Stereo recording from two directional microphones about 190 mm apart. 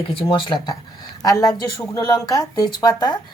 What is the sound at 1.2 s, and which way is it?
A woman's voice, 15° left (ahead or behind).